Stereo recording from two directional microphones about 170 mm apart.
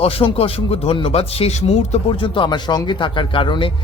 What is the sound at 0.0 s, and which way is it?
Speech, 35° left (ahead or behind).